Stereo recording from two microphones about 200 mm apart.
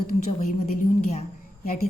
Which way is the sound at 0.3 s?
35° left (ahead or behind).